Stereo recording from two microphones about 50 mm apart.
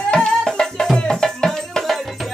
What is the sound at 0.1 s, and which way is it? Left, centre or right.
Music, centre.